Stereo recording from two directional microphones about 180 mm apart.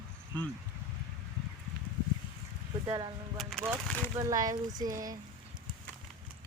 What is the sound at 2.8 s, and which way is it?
Speech, 25° right (ahead or behind).